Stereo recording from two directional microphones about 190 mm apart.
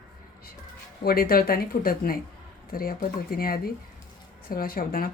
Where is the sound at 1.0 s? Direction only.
50° left (ahead or behind).